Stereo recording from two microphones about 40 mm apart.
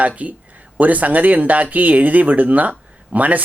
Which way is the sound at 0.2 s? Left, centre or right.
Right.